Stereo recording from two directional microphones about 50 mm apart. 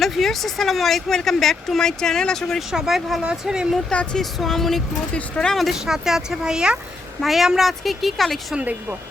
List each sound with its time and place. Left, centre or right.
0.0 s speech: centre
2.6 s speech: centre
4.1 s speech: centre
5.1 s speech: centre
5.5 s speech: centre
7.2 s speech: centre